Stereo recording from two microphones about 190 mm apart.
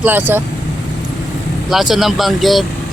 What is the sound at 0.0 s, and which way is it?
Speech, 10° right (ahead or behind).